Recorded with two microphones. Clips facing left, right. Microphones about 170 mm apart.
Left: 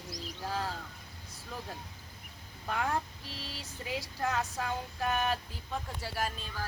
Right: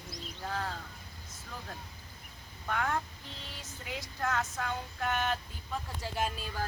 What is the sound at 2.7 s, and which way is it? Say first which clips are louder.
Speech: even; 15° left (ahead or behind).